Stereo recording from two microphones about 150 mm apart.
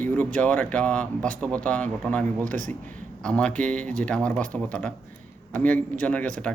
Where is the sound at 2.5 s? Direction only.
60° right (ahead or behind).